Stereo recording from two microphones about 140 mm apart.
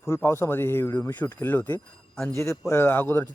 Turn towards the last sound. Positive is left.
turn(degrees=15)  # may be behind; listen again after turning